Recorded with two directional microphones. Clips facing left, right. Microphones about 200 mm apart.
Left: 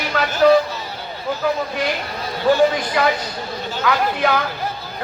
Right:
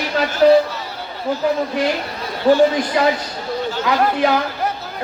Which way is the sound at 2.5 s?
30° right (ahead or behind).